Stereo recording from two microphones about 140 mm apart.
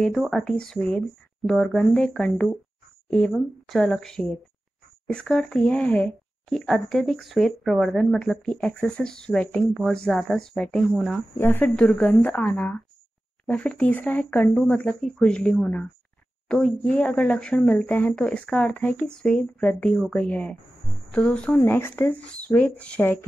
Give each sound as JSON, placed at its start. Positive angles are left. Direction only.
{"t": 0.0, "sound": "speech", "side_deg": 0}
{"t": 11.3, "sound": "speech", "side_deg": 15}